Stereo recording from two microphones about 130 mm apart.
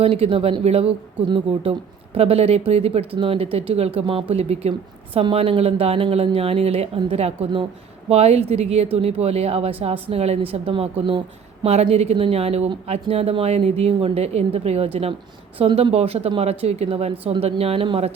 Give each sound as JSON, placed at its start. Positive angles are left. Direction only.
{"t": 0.0, "sound": "a woman's voice", "side_deg": -50}